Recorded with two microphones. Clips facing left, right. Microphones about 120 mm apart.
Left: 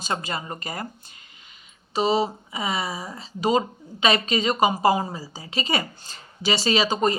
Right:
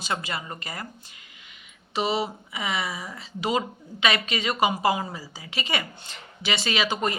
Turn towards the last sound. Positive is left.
turn(degrees=35)  # may be behind; listen again after turning